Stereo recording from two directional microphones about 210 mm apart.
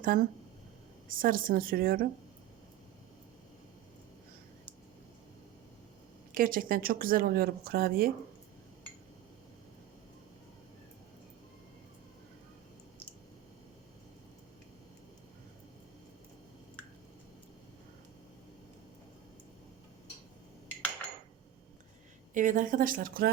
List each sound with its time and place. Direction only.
0.0 s speech: 40° right (ahead or behind)
6.3 s speech: 40° right (ahead or behind)
22.4 s speech: 40° right (ahead or behind)